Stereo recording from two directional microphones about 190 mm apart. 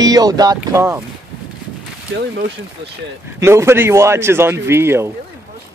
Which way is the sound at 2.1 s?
65° right (ahead or behind).